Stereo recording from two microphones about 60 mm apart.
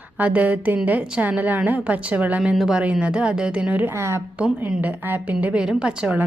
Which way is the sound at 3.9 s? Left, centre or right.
Right.